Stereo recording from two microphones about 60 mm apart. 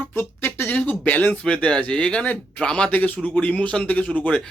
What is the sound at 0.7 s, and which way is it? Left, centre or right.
Speech, left.